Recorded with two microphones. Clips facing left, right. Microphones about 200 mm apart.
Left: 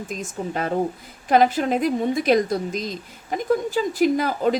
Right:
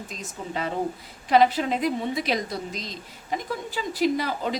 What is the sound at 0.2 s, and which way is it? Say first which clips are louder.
Speech: left 3 dB; 50° left (ahead or behind).